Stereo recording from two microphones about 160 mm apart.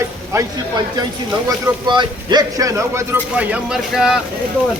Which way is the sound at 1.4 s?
30° right (ahead or behind).